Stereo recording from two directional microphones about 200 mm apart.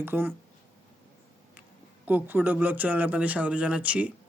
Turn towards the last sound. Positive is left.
turn(degrees=-5)  # may be behind; listen again after turning